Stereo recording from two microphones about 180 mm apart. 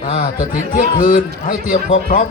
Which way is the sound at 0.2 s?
50° left (ahead or behind).